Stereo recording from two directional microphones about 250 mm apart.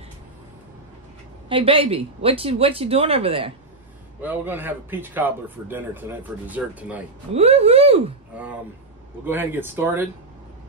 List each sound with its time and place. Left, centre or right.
1.5 s speech: right
4.2 s speech: centre
7.3 s speech: right
9.2 s speech: centre